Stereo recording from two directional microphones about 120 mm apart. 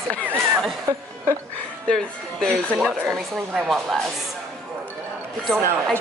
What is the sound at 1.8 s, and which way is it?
Speech, 5° left (ahead or behind).